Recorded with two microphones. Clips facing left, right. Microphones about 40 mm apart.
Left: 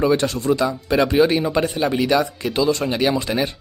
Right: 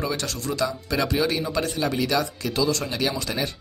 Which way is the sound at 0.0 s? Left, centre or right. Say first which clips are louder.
Left 10 dB; left.